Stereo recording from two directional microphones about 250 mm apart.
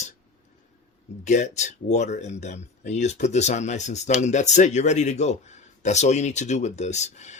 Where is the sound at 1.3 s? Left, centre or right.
Left.